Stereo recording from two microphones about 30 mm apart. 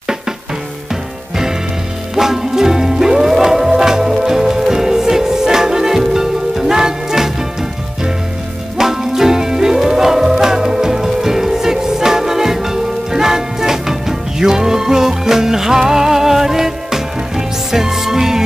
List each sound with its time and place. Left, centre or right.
2.1 s music: centre
8.7 s music: centre